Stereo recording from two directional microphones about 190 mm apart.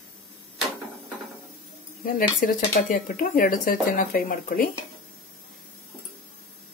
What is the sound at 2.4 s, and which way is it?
Speech, 45° left (ahead or behind).